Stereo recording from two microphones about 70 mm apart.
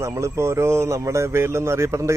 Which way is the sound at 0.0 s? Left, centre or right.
Right.